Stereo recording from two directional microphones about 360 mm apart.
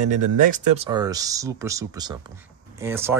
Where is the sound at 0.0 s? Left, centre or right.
Right.